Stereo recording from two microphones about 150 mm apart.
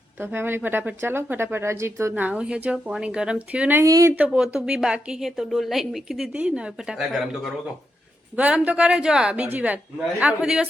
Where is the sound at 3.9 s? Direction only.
20° right (ahead or behind).